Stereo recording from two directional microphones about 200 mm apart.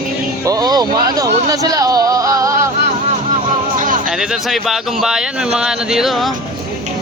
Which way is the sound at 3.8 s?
40° right (ahead or behind).